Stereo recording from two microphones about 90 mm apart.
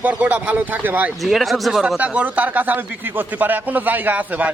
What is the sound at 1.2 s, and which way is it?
Speech, centre (ahead or behind).